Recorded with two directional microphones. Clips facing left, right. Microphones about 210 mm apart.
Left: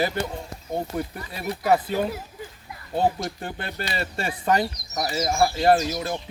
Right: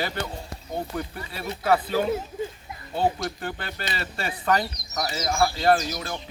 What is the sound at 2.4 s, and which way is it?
Children playing, 25° right (ahead or behind).